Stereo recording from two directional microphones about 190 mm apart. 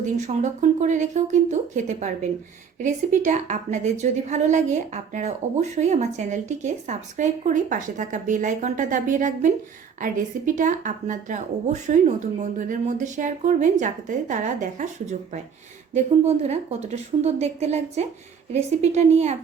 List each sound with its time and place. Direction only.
0.0 s speech: 40° right (ahead or behind)
16.2 s speech: 35° right (ahead or behind)